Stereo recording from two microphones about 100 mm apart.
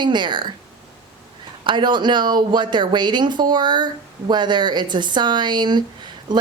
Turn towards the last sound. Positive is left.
turn(degrees=-45)  # may be behind; listen again after turning